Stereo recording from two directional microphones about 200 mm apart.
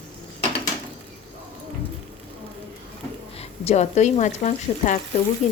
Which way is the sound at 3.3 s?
35° left (ahead or behind).